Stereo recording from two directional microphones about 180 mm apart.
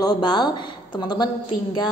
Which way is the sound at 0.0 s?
25° left (ahead or behind).